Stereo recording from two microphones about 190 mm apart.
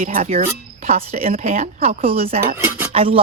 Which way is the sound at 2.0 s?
30° right (ahead or behind).